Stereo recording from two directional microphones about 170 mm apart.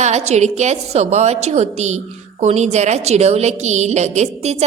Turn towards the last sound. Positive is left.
turn(degrees=-40)  # may be behind; listen again after turning